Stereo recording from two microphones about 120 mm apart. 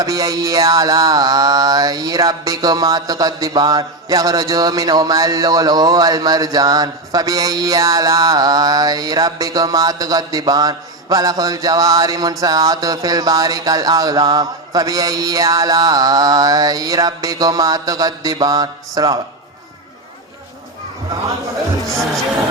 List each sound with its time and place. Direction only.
0.0 s music: 30° right (ahead or behind)